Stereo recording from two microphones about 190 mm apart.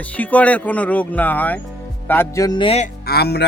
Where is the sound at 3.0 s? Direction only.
55° left (ahead or behind).